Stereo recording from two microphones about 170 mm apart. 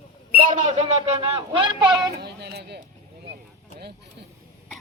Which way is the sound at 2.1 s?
70° right (ahead or behind).